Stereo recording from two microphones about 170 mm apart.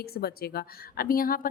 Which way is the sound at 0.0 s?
65° left (ahead or behind).